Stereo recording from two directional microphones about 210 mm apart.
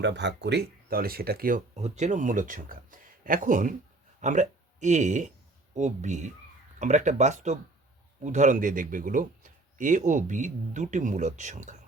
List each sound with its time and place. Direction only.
0.0 s speech: 55° right (ahead or behind); by 11.8 s 35° right (ahead or behind)